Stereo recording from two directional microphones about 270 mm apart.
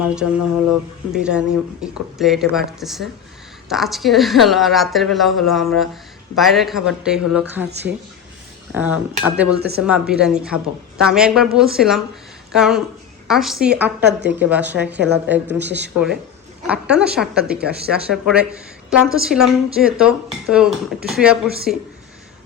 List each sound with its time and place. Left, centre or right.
0.0 s speech: centre
8.7 s speech: centre
9.6 s speech: right
9.8 s speech: centre
16.6 s speech: centre
21.4 s speech: right